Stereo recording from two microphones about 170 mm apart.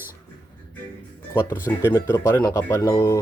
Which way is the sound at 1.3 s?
15° left (ahead or behind).